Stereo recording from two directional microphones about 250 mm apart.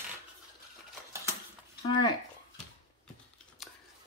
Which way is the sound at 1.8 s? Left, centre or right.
Centre.